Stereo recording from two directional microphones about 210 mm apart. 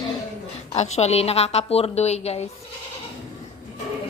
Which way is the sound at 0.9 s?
30° left (ahead or behind).